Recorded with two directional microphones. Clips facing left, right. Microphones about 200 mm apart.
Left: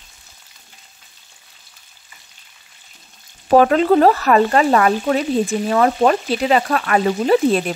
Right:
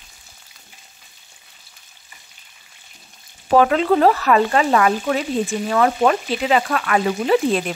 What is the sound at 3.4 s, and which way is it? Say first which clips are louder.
Speech: left 3 dB; 45° left (ahead or behind).